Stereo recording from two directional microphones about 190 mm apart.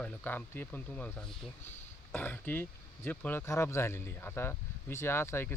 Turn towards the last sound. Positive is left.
turn(degrees=10)  # may be behind; listen again after turning